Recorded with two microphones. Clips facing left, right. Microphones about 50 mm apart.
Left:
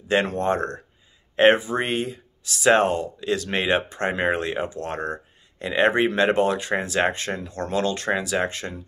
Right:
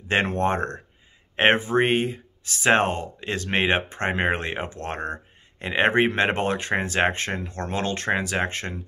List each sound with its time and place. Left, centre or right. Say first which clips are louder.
0.1 s speech: left 1 dB; right